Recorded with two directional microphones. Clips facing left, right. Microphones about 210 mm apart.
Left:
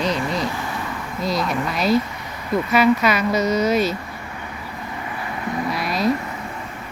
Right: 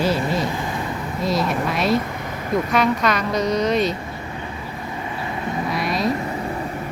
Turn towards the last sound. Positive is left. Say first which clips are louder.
# even
turn(degrees=0)  # may be behind; listen again after turning